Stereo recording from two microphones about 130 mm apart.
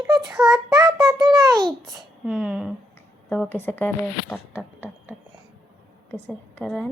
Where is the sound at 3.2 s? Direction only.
15° left (ahead or behind).